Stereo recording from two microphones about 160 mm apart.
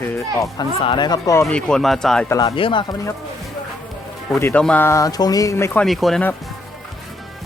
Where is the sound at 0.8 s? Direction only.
30° left (ahead or behind).